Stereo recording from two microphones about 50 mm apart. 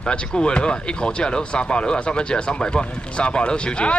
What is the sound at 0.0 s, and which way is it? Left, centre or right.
Speech, centre.